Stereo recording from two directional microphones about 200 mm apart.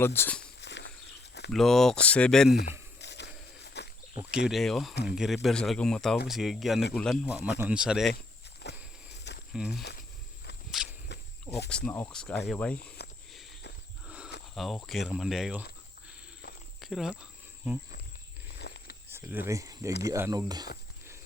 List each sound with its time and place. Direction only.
0.0 s speech: 10° left (ahead or behind)
0.6 s a sound: 60° left (ahead or behind)
1.5 s speech: centre (ahead or behind)
3.0 s biting: 60° left (ahead or behind)
4.4 s speech: centre (ahead or behind)
8.1 s walk: 55° left (ahead or behind)
9.5 s speech: centre (ahead or behind)
10.7 s walk: centre (ahead or behind)
11.7 s speech: 5° left (ahead or behind)
14.5 s speech: centre (ahead or behind)
16.8 s speech: centre (ahead or behind)
18.6 s a sound: 55° left (ahead or behind)
19.0 s speech: 10° right (ahead or behind)